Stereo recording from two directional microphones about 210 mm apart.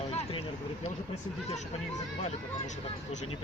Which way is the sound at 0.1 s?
30° left (ahead or behind).